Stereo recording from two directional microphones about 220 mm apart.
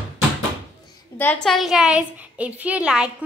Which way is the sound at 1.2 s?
5° left (ahead or behind).